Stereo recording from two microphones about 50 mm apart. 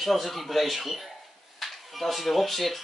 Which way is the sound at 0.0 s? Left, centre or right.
Centre.